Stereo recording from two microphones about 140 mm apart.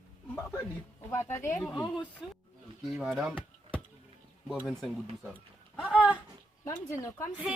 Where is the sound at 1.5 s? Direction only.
5° left (ahead or behind).